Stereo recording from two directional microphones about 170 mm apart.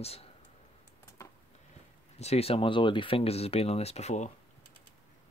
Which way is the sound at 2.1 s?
35° left (ahead or behind).